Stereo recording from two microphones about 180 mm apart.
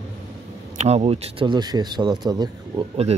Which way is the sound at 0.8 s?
35° right (ahead or behind).